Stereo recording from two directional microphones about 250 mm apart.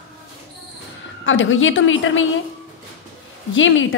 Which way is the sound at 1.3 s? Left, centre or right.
Left.